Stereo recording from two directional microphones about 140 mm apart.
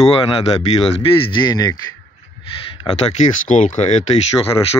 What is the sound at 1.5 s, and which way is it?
Speech, 25° left (ahead or behind).